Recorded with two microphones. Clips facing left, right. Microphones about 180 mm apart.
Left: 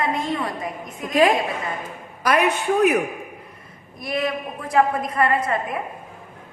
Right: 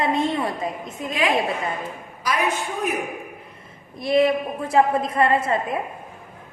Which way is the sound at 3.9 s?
25° right (ahead or behind).